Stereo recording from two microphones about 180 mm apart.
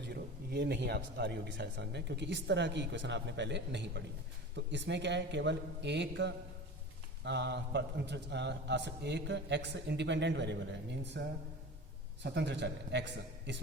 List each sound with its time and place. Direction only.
0.0 s a man's voice: 65° right (ahead or behind)